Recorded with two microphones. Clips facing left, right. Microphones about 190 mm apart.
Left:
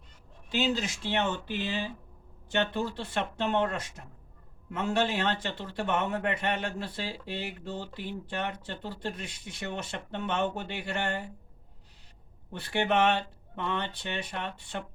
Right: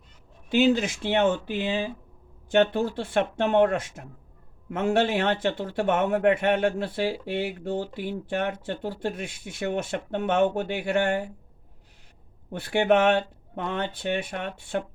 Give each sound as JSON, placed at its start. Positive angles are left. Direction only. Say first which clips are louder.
{"t": 0.5, "sound": "speech", "louder": "right 8 dB", "side_deg": -55}
{"t": 12.5, "sound": "speech", "louder": "right 7 dB", "side_deg": -50}